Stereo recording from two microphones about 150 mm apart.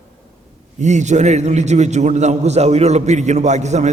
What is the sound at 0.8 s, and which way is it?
A man's voice, 50° right (ahead or behind).